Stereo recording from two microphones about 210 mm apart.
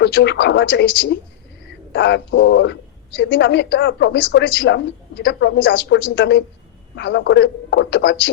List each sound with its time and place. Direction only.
0.0 s a woman's voice: 55° left (ahead or behind)